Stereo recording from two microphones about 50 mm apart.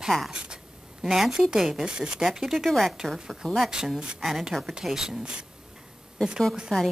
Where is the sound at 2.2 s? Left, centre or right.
Centre.